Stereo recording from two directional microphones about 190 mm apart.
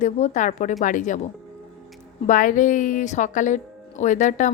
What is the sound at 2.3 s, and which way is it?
Speech, 45° left (ahead or behind).